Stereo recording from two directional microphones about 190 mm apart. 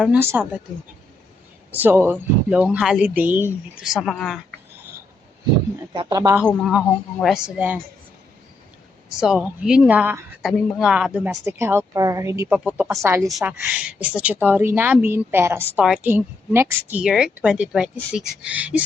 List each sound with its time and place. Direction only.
0.0 s a woman's voice: 10° right (ahead or behind)
1.7 s a woman's voice: 10° right (ahead or behind)
4.0 s speech: centre (ahead or behind)
5.9 s speech: 20° right (ahead or behind)
6.5 s speech: centre (ahead or behind)
9.2 s a woman's voice: 5° right (ahead or behind)
13.2 s a woman's voice: 5° right (ahead or behind)